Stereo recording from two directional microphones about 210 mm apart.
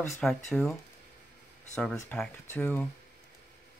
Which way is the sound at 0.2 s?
5° left (ahead or behind).